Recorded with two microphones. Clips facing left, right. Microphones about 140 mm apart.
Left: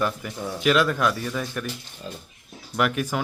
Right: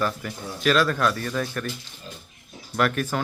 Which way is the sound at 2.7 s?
15° left (ahead or behind).